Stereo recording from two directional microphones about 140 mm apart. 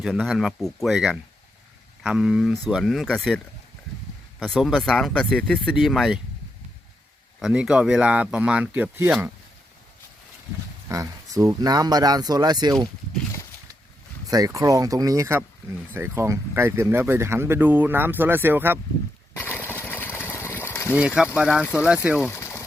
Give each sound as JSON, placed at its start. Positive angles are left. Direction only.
{"t": 0.0, "sound": "speech", "side_deg": 0}
{"t": 7.3, "sound": "speech", "side_deg": -5}
{"t": 10.8, "sound": "speech", "side_deg": -25}
{"t": 14.3, "sound": "speech", "side_deg": -25}
{"t": 19.4, "sound": "a sound", "side_deg": 15}
{"t": 21.3, "sound": "speech", "side_deg": -5}
{"t": 22.3, "sound": "a sound", "side_deg": 20}